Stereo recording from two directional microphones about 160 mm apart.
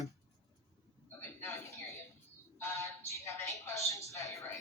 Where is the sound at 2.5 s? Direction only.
15° left (ahead or behind).